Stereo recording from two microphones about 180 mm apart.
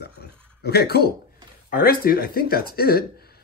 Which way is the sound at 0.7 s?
60° left (ahead or behind).